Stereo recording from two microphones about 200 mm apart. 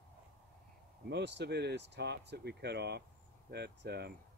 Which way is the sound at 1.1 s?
60° right (ahead or behind).